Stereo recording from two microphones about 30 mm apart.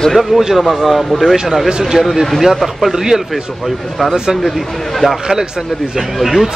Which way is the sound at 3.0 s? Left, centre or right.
Centre.